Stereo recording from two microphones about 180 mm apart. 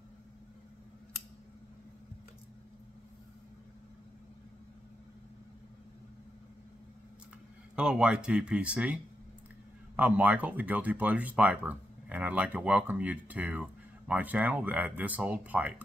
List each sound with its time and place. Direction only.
7.7 s speech: 5° right (ahead or behind)